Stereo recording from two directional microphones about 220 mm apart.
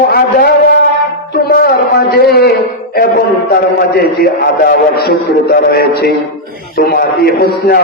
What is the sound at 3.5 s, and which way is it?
A man's voice, 45° left (ahead or behind).